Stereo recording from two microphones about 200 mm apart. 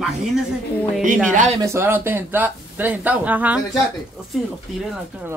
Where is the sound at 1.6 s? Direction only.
10° right (ahead or behind).